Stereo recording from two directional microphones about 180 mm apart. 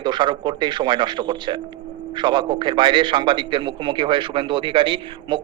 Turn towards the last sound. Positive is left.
turn(degrees=-25)  # may be behind; listen again after turning